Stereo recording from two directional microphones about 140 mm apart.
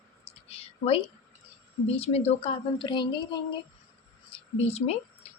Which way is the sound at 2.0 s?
45° left (ahead or behind).